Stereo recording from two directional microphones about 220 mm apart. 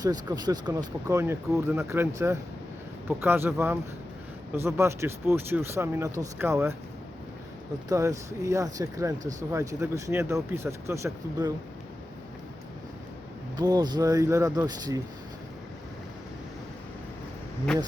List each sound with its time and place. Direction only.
0.0 s speech: 15° right (ahead or behind)
7.9 s speech: 15° right (ahead or behind)
13.6 s speech: 20° right (ahead or behind)